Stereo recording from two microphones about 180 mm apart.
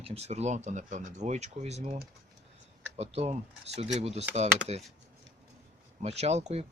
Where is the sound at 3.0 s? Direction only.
35° right (ahead or behind).